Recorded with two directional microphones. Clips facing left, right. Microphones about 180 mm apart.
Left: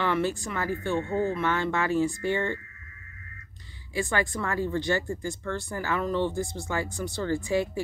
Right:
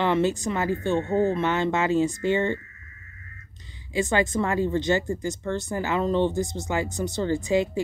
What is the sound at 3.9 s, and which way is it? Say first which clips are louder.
Speech: right 5 dB; 20° right (ahead or behind).